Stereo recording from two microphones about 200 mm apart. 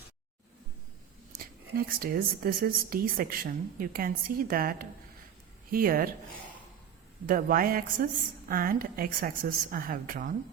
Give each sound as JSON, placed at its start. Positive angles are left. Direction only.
{"t": 1.3, "sound": "speech", "side_deg": -45}
{"t": 7.3, "sound": "speech", "side_deg": -45}